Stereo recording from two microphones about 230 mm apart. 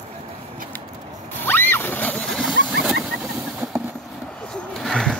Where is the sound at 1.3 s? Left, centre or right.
Centre.